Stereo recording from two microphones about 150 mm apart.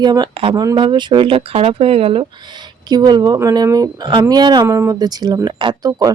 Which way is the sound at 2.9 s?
30° right (ahead or behind).